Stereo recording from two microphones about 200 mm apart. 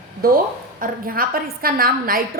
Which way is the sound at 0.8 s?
45° right (ahead or behind).